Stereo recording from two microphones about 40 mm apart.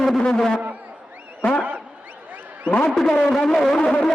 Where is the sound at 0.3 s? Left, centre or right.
Centre.